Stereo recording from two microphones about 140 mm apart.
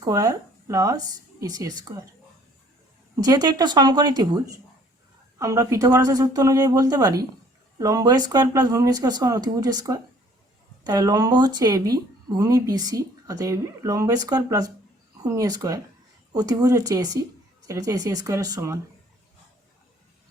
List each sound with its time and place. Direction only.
0.0 s speech: 25° right (ahead or behind)
3.2 s a woman's voice: 30° right (ahead or behind)